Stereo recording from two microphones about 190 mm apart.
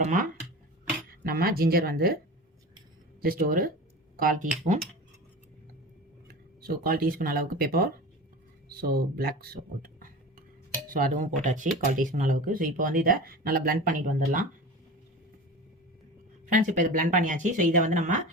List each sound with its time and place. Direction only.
0.0 s speech: 45° right (ahead or behind)
3.2 s speech: 50° right (ahead or behind)
6.2 s speech: 50° right (ahead or behind)
16.5 s speech: 45° right (ahead or behind)